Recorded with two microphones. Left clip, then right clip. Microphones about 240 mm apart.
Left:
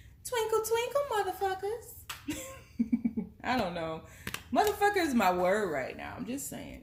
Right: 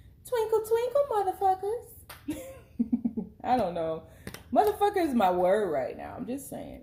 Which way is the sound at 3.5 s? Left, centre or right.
Left.